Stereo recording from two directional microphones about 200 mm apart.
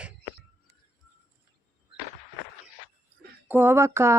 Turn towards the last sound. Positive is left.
turn(degrees=-15)  # may be behind; listen again after turning